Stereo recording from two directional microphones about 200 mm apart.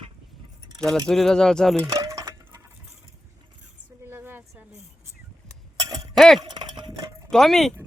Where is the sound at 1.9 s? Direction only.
20° right (ahead or behind).